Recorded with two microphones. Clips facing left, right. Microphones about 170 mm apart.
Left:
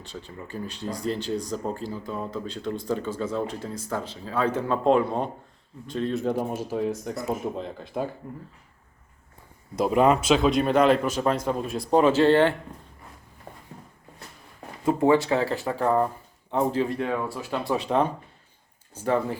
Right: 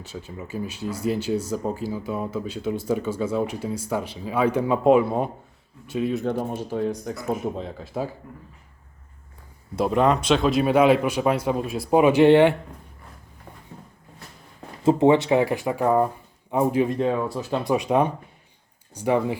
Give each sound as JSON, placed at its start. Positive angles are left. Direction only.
{"t": 0.0, "sound": "speech", "side_deg": -5}
{"t": 6.2, "sound": "speech", "side_deg": 5}
{"t": 9.7, "sound": "speech", "side_deg": 0}
{"t": 14.8, "sound": "speech", "side_deg": -20}